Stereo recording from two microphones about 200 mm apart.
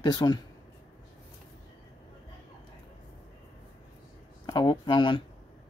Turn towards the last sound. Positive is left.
turn(degrees=25)  # may be behind; listen again after turning